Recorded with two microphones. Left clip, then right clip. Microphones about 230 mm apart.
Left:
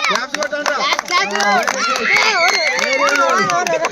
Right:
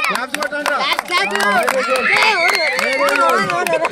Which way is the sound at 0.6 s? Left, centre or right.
Right.